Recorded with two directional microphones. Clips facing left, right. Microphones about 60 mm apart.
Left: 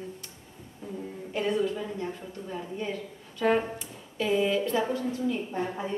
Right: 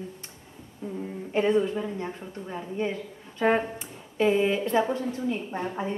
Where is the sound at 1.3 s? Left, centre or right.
Right.